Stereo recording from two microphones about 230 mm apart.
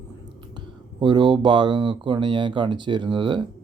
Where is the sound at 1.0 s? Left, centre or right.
Centre.